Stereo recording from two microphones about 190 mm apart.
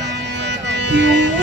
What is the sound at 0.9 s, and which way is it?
Music, 65° right (ahead or behind).